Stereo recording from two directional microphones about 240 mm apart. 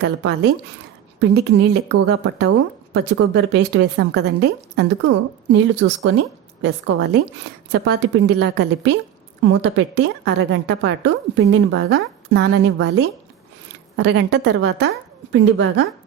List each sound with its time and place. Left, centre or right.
0.0 s a woman's voice: right